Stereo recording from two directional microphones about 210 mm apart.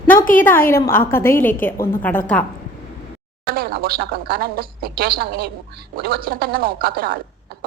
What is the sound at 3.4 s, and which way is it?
Speech, 45° right (ahead or behind).